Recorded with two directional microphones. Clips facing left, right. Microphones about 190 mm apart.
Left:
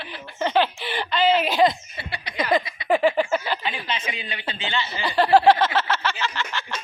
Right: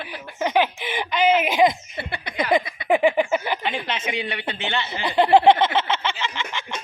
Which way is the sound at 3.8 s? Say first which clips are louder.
Right 4 dB; 75° right (ahead or behind).